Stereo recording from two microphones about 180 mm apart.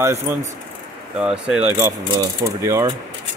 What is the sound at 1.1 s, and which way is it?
Speech, 5° right (ahead or behind).